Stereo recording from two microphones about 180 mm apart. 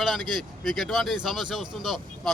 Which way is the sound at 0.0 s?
Centre (ahead or behind).